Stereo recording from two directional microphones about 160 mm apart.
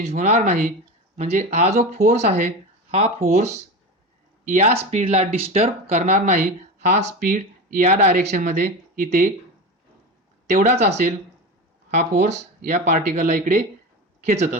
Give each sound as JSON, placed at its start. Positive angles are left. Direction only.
{"t": 0.0, "sound": "speech", "side_deg": -45}
{"t": 7.2, "sound": "speech", "side_deg": -60}
{"t": 10.5, "sound": "speech", "side_deg": -45}
{"t": 12.2, "sound": "speech", "side_deg": -50}